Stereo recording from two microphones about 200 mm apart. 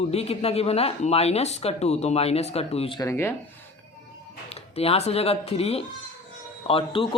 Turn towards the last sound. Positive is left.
turn(degrees=30)  # may be behind; listen again after turning